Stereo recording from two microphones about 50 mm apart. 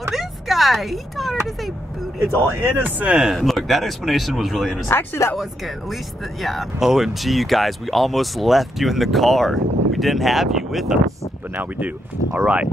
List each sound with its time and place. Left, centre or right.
0.1 s a sound: centre
2.6 s speech: right
3.1 s speech: centre
3.3 s speech: centre
4.8 s speech: left
6.4 s speech: centre
12.4 s speech: right